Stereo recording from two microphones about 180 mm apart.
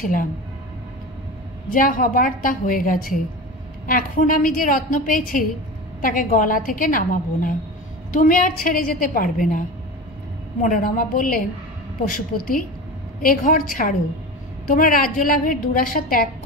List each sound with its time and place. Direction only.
0.0 s a woman's voice: 50° left (ahead or behind)
1.7 s a woman's voice: 50° left (ahead or behind)